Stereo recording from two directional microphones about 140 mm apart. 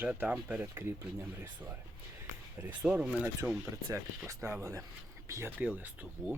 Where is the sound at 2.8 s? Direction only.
10° right (ahead or behind).